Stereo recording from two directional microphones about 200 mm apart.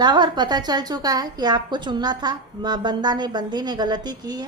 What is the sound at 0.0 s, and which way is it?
A woman's voice, 20° right (ahead or behind).